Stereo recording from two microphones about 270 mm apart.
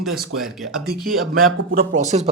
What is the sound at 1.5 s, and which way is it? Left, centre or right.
Speech, right.